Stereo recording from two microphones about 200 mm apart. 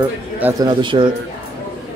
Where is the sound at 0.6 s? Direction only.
25° right (ahead or behind).